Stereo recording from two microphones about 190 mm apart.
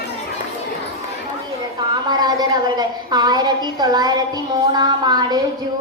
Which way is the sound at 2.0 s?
20° right (ahead or behind).